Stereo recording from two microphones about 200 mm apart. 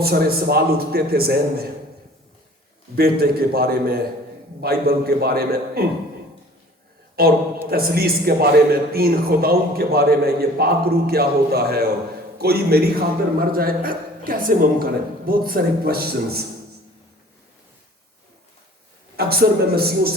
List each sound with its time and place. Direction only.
0.0 s a man's voice: 50° right (ahead or behind)
2.9 s a man's voice: 50° right (ahead or behind)
7.2 s a man's voice: 50° right (ahead or behind)
19.1 s a man's voice: 50° right (ahead or behind)